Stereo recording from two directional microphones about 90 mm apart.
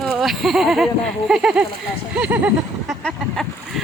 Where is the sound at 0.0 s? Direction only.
Centre (ahead or behind).